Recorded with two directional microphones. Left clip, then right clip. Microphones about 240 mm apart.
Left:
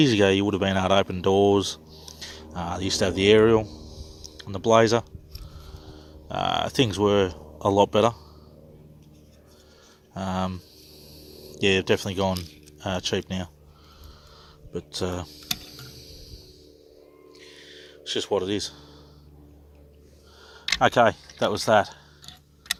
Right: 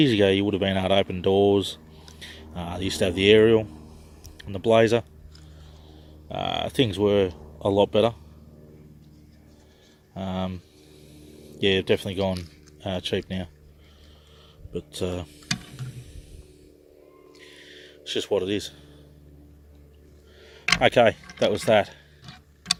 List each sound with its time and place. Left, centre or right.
0.0 s speech: centre
6.2 s speech: centre
10.2 s speech: centre
11.6 s speech: centre
14.7 s speech: centre
17.4 s a sound: centre
20.4 s a sound: centre
21.4 s speech: centre